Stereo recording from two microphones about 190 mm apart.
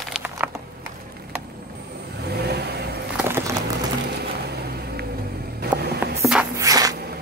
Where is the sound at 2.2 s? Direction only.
60° right (ahead or behind).